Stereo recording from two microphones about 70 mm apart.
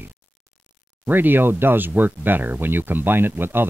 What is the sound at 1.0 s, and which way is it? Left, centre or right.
Speech, right.